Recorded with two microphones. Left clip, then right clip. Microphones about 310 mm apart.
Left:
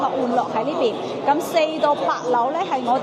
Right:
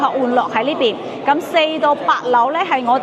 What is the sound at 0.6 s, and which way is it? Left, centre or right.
A woman's voice, right.